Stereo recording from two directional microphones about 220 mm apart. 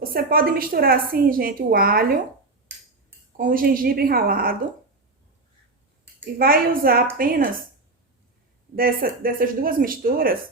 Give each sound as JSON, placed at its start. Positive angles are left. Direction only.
{"t": 0.0, "sound": "a woman's voice", "side_deg": -40}
{"t": 3.3, "sound": "a woman's voice", "side_deg": -40}
{"t": 6.4, "sound": "a woman's voice", "side_deg": -40}
{"t": 8.7, "sound": "a woman's voice", "side_deg": -40}